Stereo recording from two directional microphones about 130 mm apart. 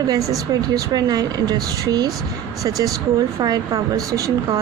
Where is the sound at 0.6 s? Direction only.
30° right (ahead or behind).